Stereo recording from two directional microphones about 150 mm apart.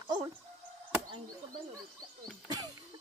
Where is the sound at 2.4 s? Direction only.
25° right (ahead or behind).